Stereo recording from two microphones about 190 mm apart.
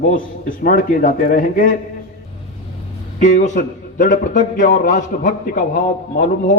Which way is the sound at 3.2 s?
40° left (ahead or behind).